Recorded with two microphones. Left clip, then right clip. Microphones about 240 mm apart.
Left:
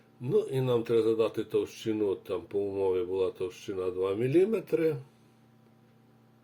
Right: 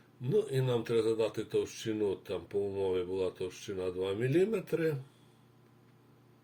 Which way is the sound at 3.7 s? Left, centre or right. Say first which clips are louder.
Left 4 dB; centre.